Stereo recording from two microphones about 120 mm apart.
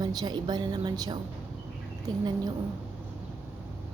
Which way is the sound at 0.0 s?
35° right (ahead or behind).